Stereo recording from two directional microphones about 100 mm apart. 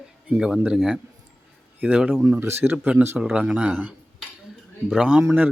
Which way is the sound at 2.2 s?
25° right (ahead or behind).